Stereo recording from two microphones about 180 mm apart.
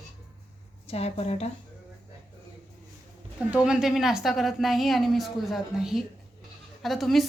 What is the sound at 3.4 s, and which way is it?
A woman's voice, 5° right (ahead or behind).